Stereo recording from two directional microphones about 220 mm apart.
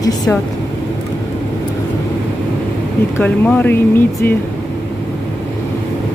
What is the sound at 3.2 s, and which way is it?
Speech, 10° left (ahead or behind).